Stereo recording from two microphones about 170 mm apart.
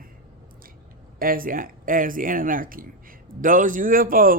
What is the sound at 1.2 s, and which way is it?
Speech, 55° right (ahead or behind).